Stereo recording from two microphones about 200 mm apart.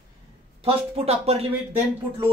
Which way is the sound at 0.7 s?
30° right (ahead or behind).